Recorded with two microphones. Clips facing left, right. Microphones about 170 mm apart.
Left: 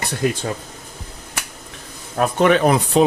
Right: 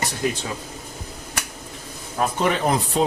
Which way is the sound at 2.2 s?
70° left (ahead or behind).